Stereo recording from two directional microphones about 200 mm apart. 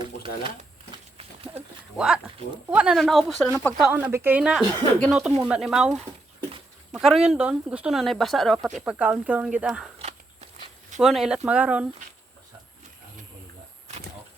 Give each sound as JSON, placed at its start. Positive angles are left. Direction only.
{"t": 0.0, "sound": "a sound", "side_deg": -25}
{"t": 2.0, "sound": "speech", "side_deg": -5}
{"t": 10.0, "sound": "walk", "side_deg": -35}
{"t": 11.0, "sound": "speech", "side_deg": 0}